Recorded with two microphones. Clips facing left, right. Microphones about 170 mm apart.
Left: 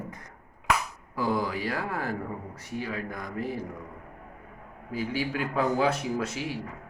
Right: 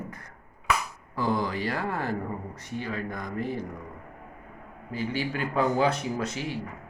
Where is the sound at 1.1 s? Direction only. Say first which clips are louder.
Even; 5° left (ahead or behind).